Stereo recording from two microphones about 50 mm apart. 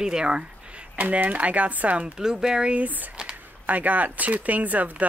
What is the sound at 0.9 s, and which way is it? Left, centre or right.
Speech, right.